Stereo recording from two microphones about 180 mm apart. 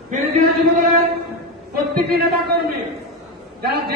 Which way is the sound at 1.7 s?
60° right (ahead or behind).